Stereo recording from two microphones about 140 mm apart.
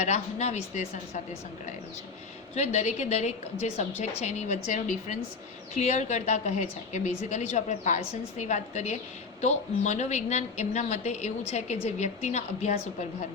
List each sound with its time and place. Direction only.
0.0 s a woman's voice: 50° left (ahead or behind)
2.6 s a woman's voice: 55° left (ahead or behind)
5.7 s a woman's voice: 55° left (ahead or behind)